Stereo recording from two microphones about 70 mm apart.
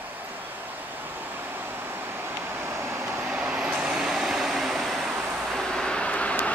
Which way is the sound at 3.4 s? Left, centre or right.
Centre.